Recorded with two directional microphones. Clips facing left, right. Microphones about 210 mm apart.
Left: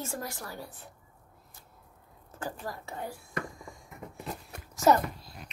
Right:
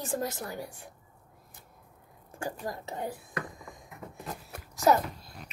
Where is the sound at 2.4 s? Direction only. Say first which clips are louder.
Right 2 dB; 20° right (ahead or behind).